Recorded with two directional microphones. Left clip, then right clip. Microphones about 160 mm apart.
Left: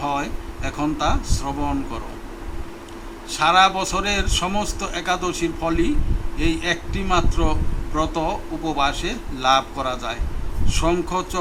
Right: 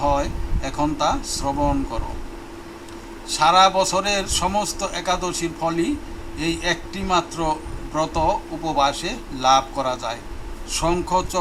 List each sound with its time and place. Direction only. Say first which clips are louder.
0.0 s speech: right 3 dB; 55° right (ahead or behind)
3.3 s a man's voice: right 1 dB; 55° right (ahead or behind)